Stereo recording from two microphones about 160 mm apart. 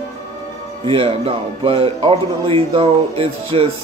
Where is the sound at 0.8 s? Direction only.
35° right (ahead or behind).